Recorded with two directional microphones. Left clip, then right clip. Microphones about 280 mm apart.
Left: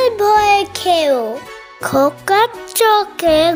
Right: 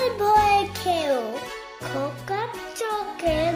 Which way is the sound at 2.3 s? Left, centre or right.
Left.